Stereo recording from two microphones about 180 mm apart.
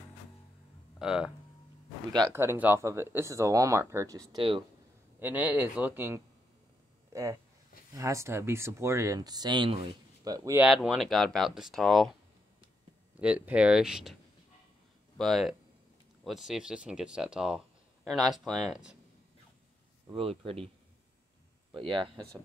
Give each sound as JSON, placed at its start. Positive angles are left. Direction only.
{"t": 0.9, "sound": "speech", "side_deg": -5}
{"t": 2.3, "sound": "speech", "side_deg": -10}
{"t": 4.4, "sound": "speech", "side_deg": -30}
{"t": 5.2, "sound": "speech", "side_deg": -10}
{"t": 7.1, "sound": "a sound", "side_deg": -15}
{"t": 7.9, "sound": "speech", "side_deg": -15}
{"t": 10.6, "sound": "speech", "side_deg": -5}
{"t": 13.2, "sound": "speech", "side_deg": -5}
{"t": 15.1, "sound": "speech", "side_deg": 0}
{"t": 20.1, "sound": "speech", "side_deg": -30}
{"t": 21.7, "sound": "speech", "side_deg": -30}